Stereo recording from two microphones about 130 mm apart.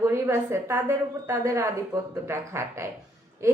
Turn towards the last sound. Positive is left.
turn(degrees=-20)  # may be behind; listen again after turning